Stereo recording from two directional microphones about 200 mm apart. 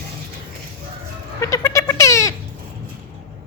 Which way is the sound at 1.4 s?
15° left (ahead or behind).